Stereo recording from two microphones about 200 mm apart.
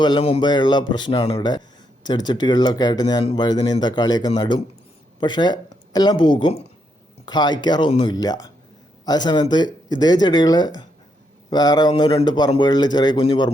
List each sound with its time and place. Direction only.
0.0 s speech: 25° left (ahead or behind)